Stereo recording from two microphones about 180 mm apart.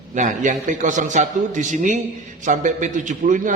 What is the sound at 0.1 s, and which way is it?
A man's voice, 45° right (ahead or behind).